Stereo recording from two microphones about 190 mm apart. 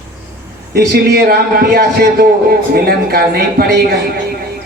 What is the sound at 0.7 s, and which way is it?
A man's voice, 60° right (ahead or behind).